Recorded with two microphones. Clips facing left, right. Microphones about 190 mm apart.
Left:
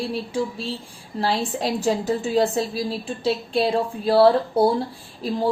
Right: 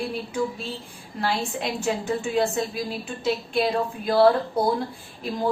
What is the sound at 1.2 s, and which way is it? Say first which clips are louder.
A woman's voice: left 3 dB; 35° left (ahead or behind).